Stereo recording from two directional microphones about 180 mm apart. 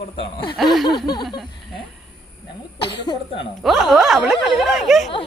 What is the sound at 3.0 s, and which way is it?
Speech, 30° left (ahead or behind).